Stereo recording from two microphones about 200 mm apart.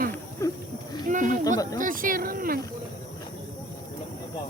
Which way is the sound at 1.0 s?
40° right (ahead or behind).